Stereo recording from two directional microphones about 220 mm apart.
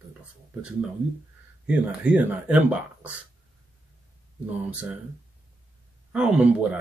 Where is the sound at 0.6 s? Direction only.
5° right (ahead or behind).